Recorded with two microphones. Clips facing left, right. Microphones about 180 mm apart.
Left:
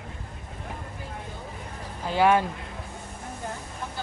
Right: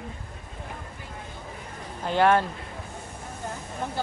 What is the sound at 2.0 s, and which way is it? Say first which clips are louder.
Speech: even; 10° left (ahead or behind).